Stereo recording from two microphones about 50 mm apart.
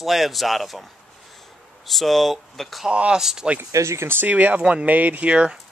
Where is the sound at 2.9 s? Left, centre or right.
Right.